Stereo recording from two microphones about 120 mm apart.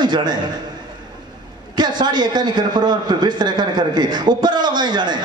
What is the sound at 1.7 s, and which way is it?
A man's voice, 35° right (ahead or behind).